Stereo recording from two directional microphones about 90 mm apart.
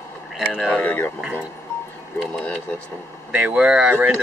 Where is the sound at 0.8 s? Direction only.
15° left (ahead or behind).